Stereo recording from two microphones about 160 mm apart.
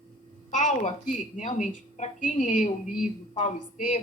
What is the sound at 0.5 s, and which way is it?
A woman's voice, 50° left (ahead or behind).